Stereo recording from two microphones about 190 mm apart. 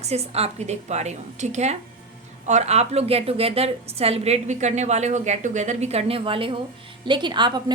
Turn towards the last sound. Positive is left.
turn(degrees=-25)  # may be behind; listen again after turning